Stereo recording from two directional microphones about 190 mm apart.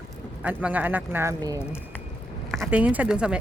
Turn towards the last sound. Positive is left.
turn(degrees=-5)  # may be behind; listen again after turning